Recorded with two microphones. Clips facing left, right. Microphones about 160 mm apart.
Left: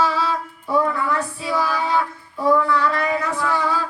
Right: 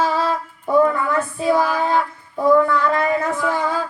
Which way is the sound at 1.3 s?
50° right (ahead or behind).